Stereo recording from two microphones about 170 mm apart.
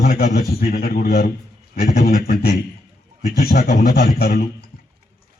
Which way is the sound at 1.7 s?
65° left (ahead or behind).